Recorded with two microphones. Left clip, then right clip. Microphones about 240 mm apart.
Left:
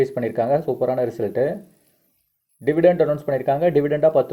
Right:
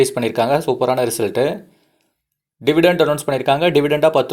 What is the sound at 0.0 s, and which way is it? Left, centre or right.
Speech, centre.